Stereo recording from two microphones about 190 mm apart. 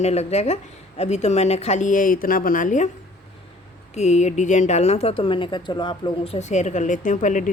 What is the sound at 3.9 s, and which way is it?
A woman's voice, 35° left (ahead or behind).